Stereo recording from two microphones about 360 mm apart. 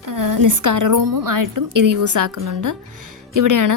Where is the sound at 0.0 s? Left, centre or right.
Right.